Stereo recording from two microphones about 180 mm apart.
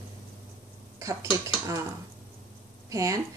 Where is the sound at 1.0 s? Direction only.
15° right (ahead or behind).